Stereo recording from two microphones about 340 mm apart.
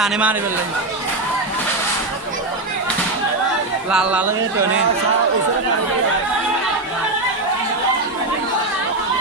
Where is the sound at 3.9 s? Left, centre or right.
Centre.